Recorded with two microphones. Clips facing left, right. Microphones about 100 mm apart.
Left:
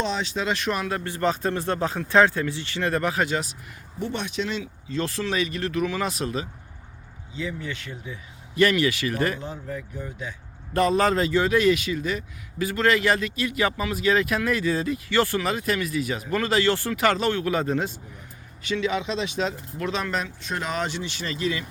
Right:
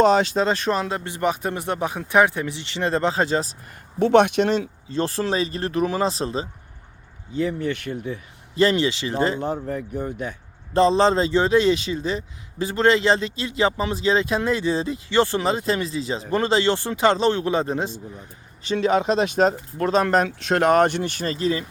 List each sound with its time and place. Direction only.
0.0 s speech: 50° right (ahead or behind)
0.4 s a man's voice: 35° right (ahead or behind)
4.0 s speech: 70° right (ahead or behind); by 4.7 s 45° right (ahead or behind)
4.9 s speech: 35° right (ahead or behind)
7.3 s speech: 50° right (ahead or behind)
8.5 s a man's voice: 30° right (ahead or behind)
9.9 s speech: 55° right (ahead or behind)
10.8 s a man's voice: 25° right (ahead or behind)
18.6 s speech: 40° right (ahead or behind)
20.2 s speech: 70° right (ahead or behind); by 21.7 s 35° right (ahead or behind)